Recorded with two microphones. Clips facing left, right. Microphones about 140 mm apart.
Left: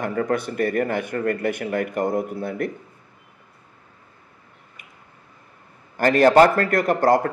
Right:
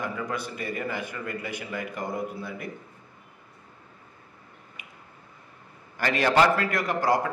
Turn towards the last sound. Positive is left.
turn(degrees=55)  # may be behind; listen again after turning